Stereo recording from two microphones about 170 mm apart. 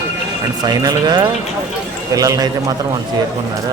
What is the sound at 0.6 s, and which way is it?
Speech, 25° right (ahead or behind).